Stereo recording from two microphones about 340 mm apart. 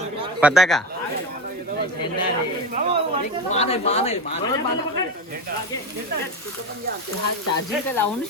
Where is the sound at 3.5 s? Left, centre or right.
Centre.